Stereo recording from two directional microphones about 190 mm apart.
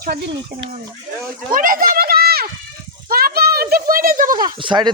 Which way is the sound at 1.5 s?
45° right (ahead or behind).